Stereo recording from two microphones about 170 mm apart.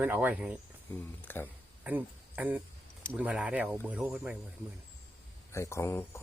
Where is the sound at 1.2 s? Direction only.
10° left (ahead or behind).